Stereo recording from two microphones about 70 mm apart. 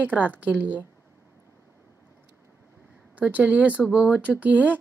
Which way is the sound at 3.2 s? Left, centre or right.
Right.